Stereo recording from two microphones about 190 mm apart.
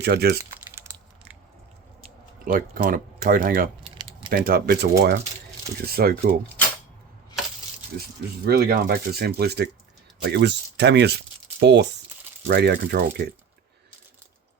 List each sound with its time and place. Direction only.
0.0 s speech: 60° right (ahead or behind)
2.4 s speech: 50° right (ahead or behind)
8.4 s speech: 55° right (ahead or behind)